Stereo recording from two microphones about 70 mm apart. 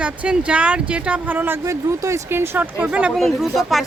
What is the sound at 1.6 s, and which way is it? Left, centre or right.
Speech, right.